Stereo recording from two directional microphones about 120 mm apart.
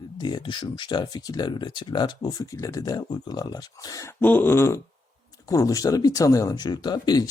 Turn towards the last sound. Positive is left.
turn(degrees=35)  # may be behind; listen again after turning